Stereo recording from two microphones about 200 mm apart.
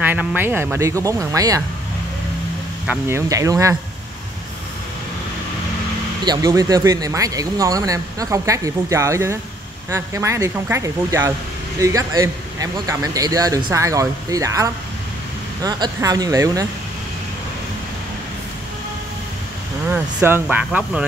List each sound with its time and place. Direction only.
0.0 s speech: 5° right (ahead or behind)
2.9 s speech: 15° right (ahead or behind)
6.2 s speech: 20° right (ahead or behind)
19.9 s speech: 10° right (ahead or behind)